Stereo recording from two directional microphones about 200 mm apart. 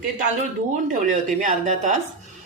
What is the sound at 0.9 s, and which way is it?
A woman's voice, 40° right (ahead or behind).